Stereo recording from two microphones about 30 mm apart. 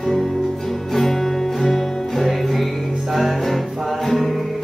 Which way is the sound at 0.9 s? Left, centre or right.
Centre.